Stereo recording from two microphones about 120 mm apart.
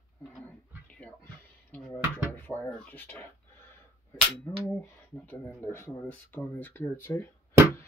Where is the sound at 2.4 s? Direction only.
15° left (ahead or behind).